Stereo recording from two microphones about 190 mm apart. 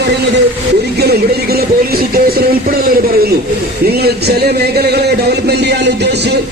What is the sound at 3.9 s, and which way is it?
Speech, 55° right (ahead or behind).